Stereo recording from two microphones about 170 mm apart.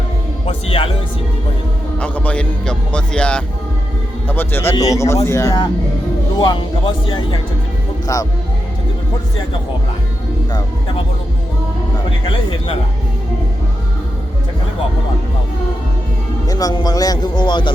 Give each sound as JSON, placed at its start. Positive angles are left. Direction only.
{"t": 0.4, "sound": "music", "side_deg": 35}
{"t": 2.0, "sound": "a man's voice", "side_deg": 10}
{"t": 16.5, "sound": "speech", "side_deg": 20}